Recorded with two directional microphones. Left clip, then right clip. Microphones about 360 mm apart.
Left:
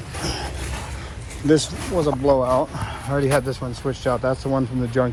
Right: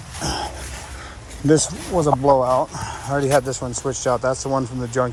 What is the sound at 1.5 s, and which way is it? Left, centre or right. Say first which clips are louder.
Speech: right 1 dB; centre.